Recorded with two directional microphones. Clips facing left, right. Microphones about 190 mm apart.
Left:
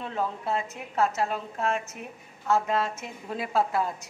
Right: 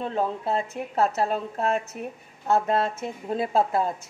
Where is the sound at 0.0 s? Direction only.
35° right (ahead or behind).